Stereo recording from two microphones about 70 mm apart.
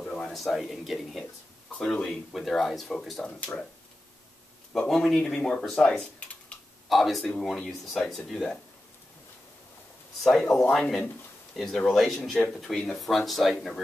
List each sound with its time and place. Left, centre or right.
0.0 s speech: centre
4.7 s speech: centre
6.9 s speech: centre
10.2 s speech: centre